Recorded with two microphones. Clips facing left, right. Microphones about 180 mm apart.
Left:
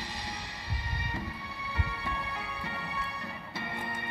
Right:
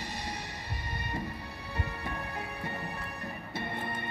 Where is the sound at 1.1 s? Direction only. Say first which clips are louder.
Right 1 dB; 50° right (ahead or behind).